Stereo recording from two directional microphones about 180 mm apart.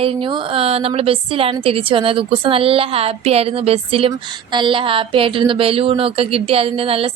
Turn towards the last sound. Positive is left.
turn(degrees=-30)  # may be behind; listen again after turning